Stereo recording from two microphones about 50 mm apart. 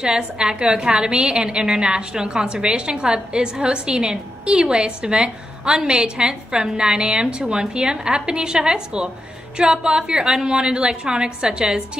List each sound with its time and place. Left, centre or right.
0.0 s a woman's voice: centre